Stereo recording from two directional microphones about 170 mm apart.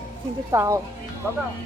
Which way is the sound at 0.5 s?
20° right (ahead or behind).